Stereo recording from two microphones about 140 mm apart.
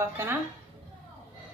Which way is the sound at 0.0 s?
15° right (ahead or behind).